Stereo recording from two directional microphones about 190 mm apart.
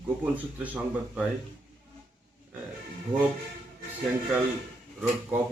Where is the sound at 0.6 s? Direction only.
10° right (ahead or behind).